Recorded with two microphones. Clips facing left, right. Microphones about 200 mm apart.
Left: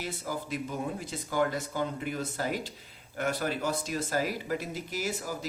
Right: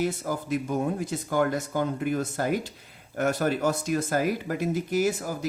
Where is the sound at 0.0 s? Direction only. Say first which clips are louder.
Right 8 dB; 50° right (ahead or behind).